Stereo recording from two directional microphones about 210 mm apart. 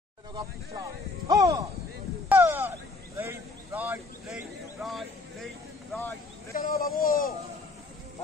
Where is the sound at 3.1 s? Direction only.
10° right (ahead or behind).